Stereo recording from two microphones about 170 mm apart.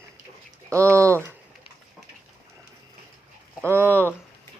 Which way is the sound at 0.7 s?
15° right (ahead or behind).